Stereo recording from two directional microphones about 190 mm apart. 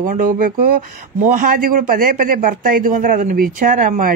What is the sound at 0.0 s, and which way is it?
Speech, 45° right (ahead or behind).